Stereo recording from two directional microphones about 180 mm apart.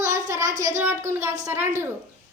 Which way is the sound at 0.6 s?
15° right (ahead or behind).